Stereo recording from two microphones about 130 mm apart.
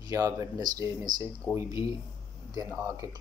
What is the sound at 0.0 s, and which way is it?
Speech, 25° right (ahead or behind).